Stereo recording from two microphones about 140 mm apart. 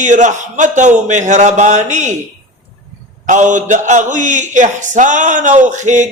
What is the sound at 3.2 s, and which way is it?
A man's voice, 65° right (ahead or behind).